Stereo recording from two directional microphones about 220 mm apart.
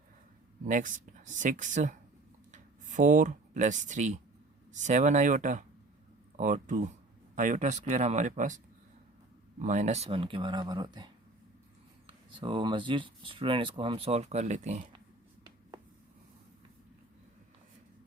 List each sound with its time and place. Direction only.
0.6 s speech: 35° right (ahead or behind)